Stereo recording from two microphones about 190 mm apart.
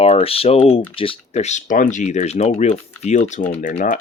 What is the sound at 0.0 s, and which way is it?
Speech, 30° left (ahead or behind).